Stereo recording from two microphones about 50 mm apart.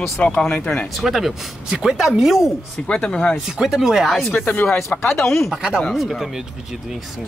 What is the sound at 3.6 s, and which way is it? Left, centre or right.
Speech, centre.